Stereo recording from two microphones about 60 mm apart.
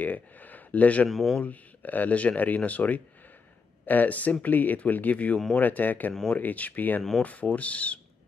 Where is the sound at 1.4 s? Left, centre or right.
Left.